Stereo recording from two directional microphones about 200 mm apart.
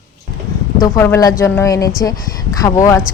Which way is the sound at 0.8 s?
15° left (ahead or behind).